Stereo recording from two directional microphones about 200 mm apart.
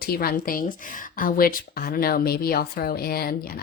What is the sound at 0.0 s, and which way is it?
A woman's voice, 45° left (ahead or behind).